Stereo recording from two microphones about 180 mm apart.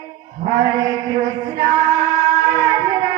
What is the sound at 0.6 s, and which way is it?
Music, 20° right (ahead or behind).